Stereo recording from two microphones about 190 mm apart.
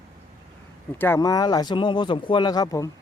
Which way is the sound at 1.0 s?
15° left (ahead or behind).